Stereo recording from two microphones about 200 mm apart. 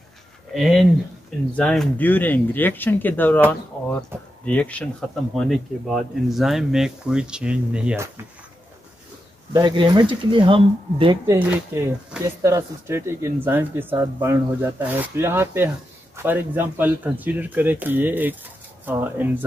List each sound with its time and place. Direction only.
0.5 s speech: centre (ahead or behind)
4.1 s speech: 10° right (ahead or behind)
4.5 s speech: 5° left (ahead or behind)
9.5 s speech: 20° right (ahead or behind)
11.2 s speech: 10° right (ahead or behind)